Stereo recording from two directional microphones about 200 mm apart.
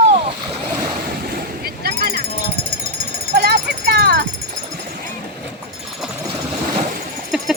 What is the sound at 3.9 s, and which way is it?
Music, 55° right (ahead or behind).